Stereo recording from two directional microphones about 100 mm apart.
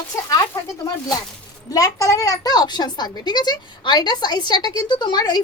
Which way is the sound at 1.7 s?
35° left (ahead or behind).